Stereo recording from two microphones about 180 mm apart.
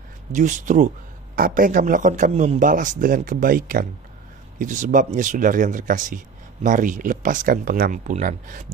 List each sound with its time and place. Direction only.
0.3 s speech: 45° right (ahead or behind)